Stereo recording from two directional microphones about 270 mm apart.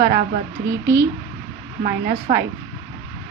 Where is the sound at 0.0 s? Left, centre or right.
Right.